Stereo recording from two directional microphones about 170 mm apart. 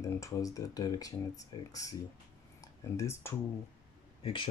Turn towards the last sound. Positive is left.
turn(degrees=30)  # may be behind; listen again after turning